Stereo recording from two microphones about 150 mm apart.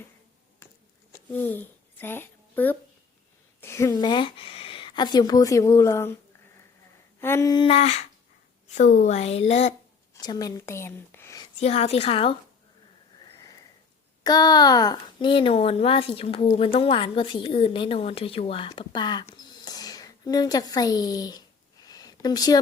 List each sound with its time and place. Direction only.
1.3 s a woman's voice: 15° left (ahead or behind)
7.2 s a sound: 15° left (ahead or behind)
7.5 s a woman's voice: 35° left (ahead or behind)
10.2 s a woman's voice: 25° left (ahead or behind)
11.6 s a woman's voice: 45° left (ahead or behind)
14.3 s speech: 25° left (ahead or behind)
19.2 s a sound: 25° left (ahead or behind)